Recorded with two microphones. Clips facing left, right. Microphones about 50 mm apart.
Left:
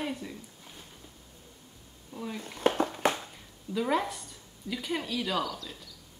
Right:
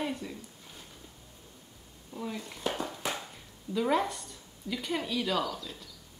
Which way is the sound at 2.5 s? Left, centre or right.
Left.